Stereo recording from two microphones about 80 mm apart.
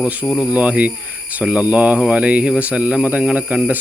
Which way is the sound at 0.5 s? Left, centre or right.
Centre.